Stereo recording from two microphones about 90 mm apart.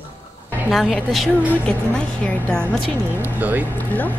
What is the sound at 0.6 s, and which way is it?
Speech, centre (ahead or behind).